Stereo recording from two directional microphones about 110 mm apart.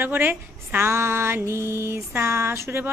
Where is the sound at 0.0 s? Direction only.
20° right (ahead or behind).